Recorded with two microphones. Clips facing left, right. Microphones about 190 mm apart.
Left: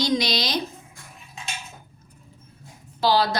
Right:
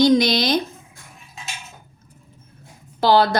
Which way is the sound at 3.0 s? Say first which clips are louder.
Right 5 dB; 55° right (ahead or behind).